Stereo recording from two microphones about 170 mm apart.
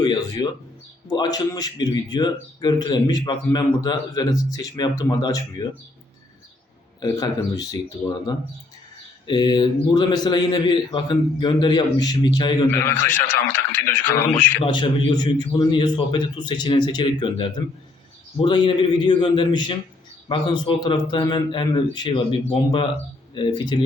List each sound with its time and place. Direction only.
0.0 s a man's voice: 25° left (ahead or behind)
7.0 s a man's voice: 20° left (ahead or behind)
12.8 s a man's voice: 10° left (ahead or behind)
14.6 s a man's voice: 30° left (ahead or behind)